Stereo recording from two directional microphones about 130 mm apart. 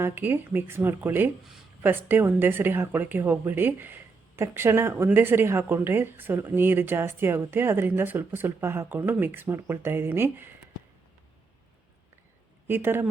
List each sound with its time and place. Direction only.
0.0 s speech: 15° right (ahead or behind)
12.6 s speech: 15° right (ahead or behind)